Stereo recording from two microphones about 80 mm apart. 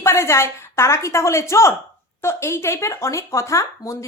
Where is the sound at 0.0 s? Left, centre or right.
Left.